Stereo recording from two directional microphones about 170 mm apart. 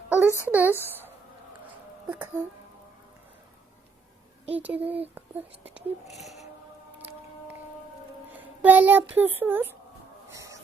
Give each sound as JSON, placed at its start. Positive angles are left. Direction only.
{"t": 0.1, "sound": "a sound", "side_deg": -15}
{"t": 0.4, "sound": "speech", "side_deg": -10}
{"t": 4.5, "sound": "speech", "side_deg": -10}
{"t": 8.4, "sound": "a child's voice", "side_deg": -10}
{"t": 10.3, "sound": "music", "side_deg": -20}